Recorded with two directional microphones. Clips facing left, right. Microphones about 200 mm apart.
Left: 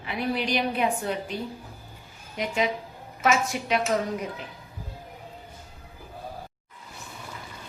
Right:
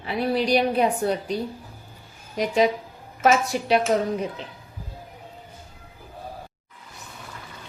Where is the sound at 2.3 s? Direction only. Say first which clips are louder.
Right 6 dB; 35° right (ahead or behind).